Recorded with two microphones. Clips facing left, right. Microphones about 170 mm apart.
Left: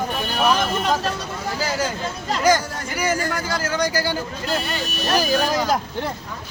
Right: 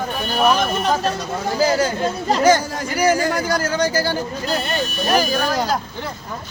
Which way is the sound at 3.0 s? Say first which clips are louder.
Right 6 dB; 40° right (ahead or behind).